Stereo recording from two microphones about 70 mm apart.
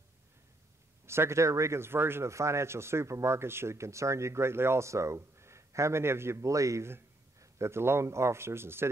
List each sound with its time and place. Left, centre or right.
1.0 s speech: right